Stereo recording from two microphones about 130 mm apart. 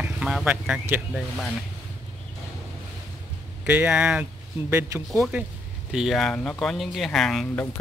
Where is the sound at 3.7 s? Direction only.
10° right (ahead or behind).